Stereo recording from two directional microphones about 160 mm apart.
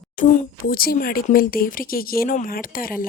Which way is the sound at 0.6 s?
65° left (ahead or behind).